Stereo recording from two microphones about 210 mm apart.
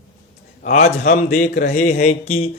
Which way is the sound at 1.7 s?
35° left (ahead or behind).